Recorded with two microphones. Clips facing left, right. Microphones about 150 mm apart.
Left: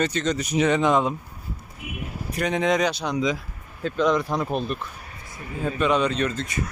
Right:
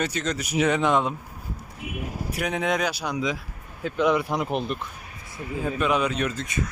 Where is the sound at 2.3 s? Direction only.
5° right (ahead or behind).